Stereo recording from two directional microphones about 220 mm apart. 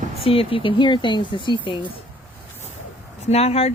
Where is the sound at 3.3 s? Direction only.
25° left (ahead or behind).